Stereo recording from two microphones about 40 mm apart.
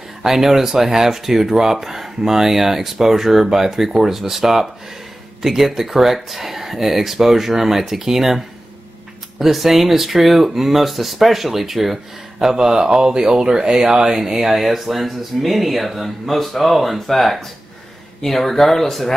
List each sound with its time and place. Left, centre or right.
0.2 s speech: centre
9.4 s speech: centre
12.4 s speech: centre